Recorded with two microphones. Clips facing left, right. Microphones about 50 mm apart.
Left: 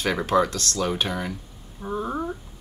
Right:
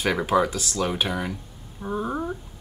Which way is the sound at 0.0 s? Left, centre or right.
Centre.